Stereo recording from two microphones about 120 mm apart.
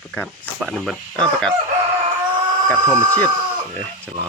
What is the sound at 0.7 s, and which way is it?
Speech, 5° left (ahead or behind).